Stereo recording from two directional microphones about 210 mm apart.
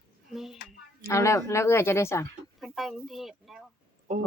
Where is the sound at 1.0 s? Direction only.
15° left (ahead or behind).